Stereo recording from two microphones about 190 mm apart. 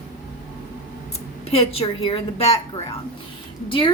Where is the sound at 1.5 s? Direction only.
30° left (ahead or behind).